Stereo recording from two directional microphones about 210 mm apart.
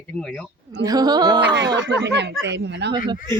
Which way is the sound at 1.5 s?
55° right (ahead or behind).